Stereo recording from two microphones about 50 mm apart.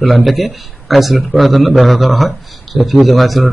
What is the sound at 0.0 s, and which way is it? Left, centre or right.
A man's voice, centre.